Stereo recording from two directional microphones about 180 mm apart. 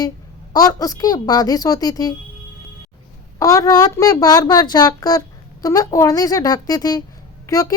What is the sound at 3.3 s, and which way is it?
A woman's voice, 20° left (ahead or behind).